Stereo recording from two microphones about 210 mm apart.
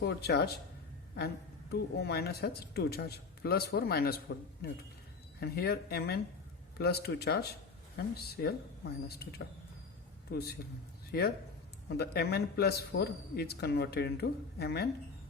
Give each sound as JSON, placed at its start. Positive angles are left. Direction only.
{"t": 0.0, "sound": "speech", "side_deg": 50}
{"t": 1.7, "sound": "speech", "side_deg": 50}
{"t": 10.3, "sound": "speech", "side_deg": 45}